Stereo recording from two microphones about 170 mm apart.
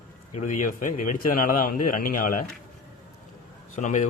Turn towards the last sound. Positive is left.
turn(degrees=45)  # may be behind; listen again after turning